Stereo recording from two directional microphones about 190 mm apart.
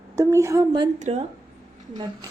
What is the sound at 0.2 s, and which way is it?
Speech, 15° right (ahead or behind).